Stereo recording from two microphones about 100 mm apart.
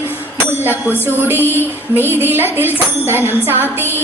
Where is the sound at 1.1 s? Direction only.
20° right (ahead or behind).